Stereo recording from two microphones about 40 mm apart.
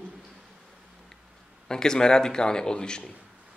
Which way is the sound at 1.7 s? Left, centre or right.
Centre.